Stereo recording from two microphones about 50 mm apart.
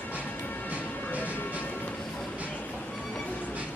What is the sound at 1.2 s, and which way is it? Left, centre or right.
Train, left.